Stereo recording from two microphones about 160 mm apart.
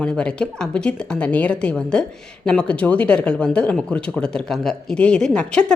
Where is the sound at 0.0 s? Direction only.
5° left (ahead or behind).